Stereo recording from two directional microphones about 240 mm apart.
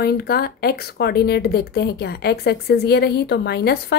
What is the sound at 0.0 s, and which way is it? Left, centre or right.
Speech, left.